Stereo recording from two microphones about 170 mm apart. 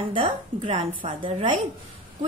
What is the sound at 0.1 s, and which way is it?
A woman's voice, 35° right (ahead or behind).